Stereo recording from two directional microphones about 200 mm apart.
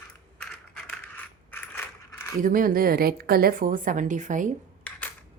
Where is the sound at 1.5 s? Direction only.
10° left (ahead or behind).